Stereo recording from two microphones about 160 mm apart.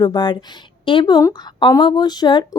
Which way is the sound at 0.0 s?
30° left (ahead or behind).